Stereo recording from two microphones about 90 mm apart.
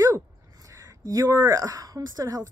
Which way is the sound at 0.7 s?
40° right (ahead or behind).